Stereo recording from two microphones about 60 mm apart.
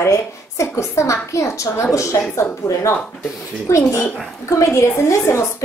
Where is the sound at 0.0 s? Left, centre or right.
Left.